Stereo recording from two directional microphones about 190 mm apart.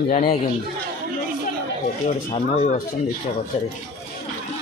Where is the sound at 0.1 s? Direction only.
40° left (ahead or behind).